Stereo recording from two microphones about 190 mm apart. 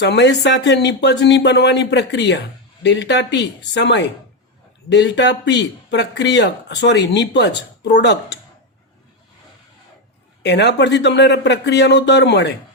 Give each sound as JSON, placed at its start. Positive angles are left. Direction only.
{"t": 0.0, "sound": "speech", "side_deg": 65}
{"t": 10.4, "sound": "speech", "side_deg": 65}